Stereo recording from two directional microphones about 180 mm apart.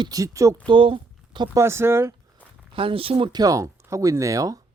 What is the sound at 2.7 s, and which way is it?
Speech, 30° right (ahead or behind).